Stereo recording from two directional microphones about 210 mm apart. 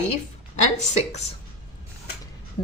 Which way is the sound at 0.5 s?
35° left (ahead or behind).